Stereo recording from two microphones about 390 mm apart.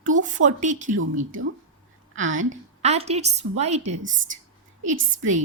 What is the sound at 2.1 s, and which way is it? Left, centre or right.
Speech, right.